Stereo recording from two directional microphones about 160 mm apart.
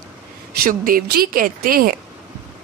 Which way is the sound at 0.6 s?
60° right (ahead or behind).